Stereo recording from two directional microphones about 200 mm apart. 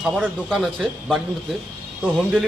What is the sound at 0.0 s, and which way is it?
A man's voice, 5° right (ahead or behind).